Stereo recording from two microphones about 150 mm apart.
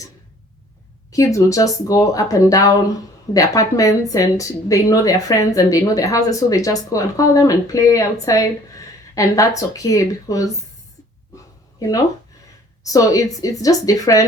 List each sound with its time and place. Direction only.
1.1 s speech: 20° left (ahead or behind)
12.8 s speech: 20° left (ahead or behind)